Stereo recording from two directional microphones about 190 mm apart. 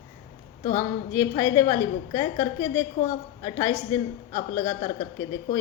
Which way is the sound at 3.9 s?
15° left (ahead or behind).